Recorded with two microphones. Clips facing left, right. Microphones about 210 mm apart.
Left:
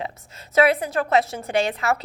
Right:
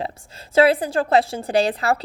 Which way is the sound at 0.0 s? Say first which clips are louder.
Right 3 dB; 30° right (ahead or behind).